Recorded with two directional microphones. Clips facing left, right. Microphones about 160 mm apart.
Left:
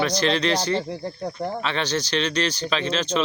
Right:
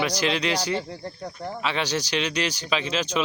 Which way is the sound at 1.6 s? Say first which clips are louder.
Right 2 dB; 10° right (ahead or behind).